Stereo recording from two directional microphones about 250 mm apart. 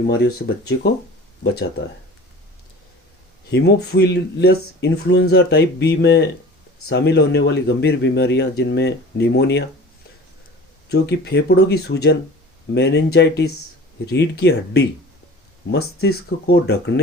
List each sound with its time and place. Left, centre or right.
0.1 s speech: left
3.5 s speech: left
10.8 s speech: left